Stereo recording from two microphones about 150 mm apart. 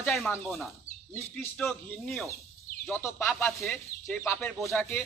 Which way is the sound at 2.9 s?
15° left (ahead or behind).